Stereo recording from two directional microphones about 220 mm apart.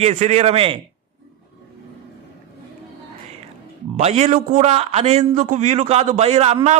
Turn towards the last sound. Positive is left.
turn(degrees=-30)  # may be behind; listen again after turning